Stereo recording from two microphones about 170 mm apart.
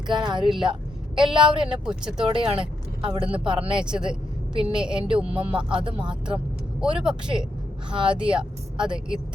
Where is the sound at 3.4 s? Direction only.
5° right (ahead or behind).